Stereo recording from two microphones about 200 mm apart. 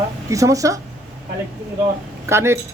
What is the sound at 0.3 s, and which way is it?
Speech, 15° right (ahead or behind).